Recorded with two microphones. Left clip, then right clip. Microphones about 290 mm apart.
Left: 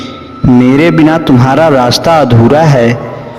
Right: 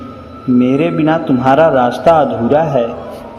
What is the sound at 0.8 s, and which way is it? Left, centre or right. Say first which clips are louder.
A man's voice: left 6 dB; left.